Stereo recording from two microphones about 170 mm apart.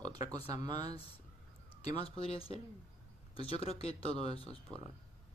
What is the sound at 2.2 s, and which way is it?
Speech, 35° left (ahead or behind).